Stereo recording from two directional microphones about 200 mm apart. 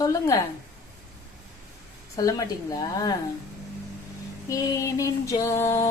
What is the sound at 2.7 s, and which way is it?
Music, 20° left (ahead or behind).